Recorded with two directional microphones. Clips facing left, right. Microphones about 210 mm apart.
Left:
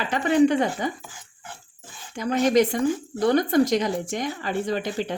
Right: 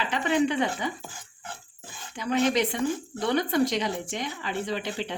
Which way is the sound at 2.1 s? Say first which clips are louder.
Left 5 dB; 45° left (ahead or behind).